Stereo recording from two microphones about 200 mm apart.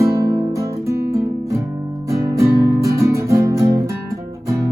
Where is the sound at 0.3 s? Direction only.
20° right (ahead or behind).